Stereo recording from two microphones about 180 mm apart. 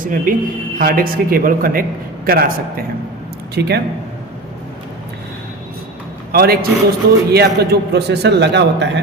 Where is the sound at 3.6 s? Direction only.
70° right (ahead or behind).